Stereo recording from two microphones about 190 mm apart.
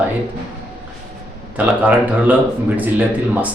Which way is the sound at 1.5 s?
10° right (ahead or behind).